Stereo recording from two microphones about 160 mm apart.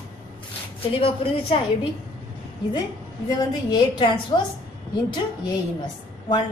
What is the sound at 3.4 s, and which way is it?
A woman's voice, 25° left (ahead or behind).